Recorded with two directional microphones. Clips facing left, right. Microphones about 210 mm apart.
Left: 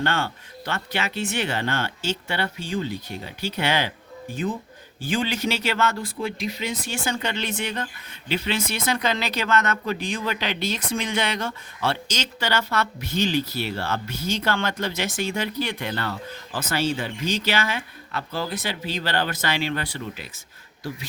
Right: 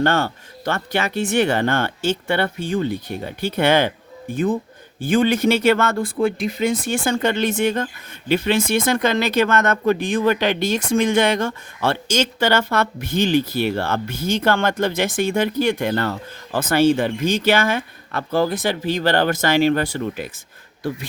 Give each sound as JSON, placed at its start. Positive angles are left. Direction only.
{"t": 0.0, "sound": "speech", "side_deg": -45}